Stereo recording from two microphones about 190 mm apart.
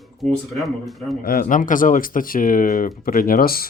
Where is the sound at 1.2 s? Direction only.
50° left (ahead or behind).